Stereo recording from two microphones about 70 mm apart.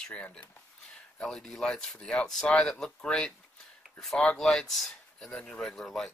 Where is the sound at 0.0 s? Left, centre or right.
Centre.